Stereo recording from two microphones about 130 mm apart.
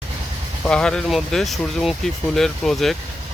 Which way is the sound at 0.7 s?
5° left (ahead or behind).